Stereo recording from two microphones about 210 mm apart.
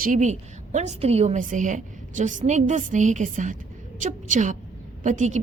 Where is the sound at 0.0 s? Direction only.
40° right (ahead or behind).